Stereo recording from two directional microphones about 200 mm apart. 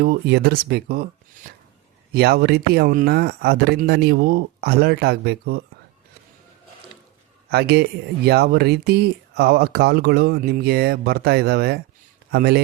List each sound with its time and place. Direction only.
0.0 s speech: 55° right (ahead or behind)
2.1 s speech: 55° right (ahead or behind)
7.5 s speech: 55° right (ahead or behind)